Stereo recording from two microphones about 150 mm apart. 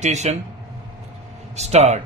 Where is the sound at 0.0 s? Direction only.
50° right (ahead or behind).